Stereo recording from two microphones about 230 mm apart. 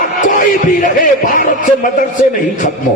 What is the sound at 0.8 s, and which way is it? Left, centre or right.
Music, left.